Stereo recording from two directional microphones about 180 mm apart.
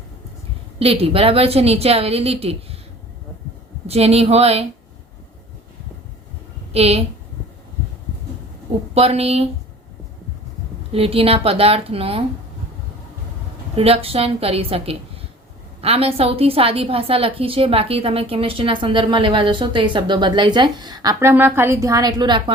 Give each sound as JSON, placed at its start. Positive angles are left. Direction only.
{"t": 0.8, "sound": "a woman's voice", "side_deg": -30}
{"t": 3.8, "sound": "a woman's voice", "side_deg": -35}
{"t": 6.7, "sound": "a woman's voice", "side_deg": -35}
{"t": 9.0, "sound": "a woman's voice", "side_deg": -35}
{"t": 10.9, "sound": "a woman's voice", "side_deg": -35}
{"t": 13.7, "sound": "a woman's voice", "side_deg": -35}